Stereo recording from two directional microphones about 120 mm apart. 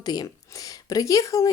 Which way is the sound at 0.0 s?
35° left (ahead or behind).